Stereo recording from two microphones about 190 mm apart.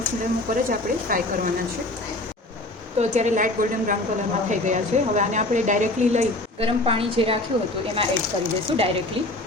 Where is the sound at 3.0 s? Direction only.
40° right (ahead or behind).